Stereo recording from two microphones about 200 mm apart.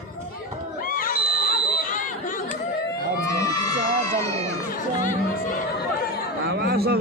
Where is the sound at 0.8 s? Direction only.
45° left (ahead or behind).